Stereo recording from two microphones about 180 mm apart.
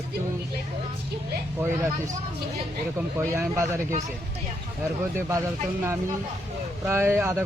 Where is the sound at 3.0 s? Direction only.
15° right (ahead or behind).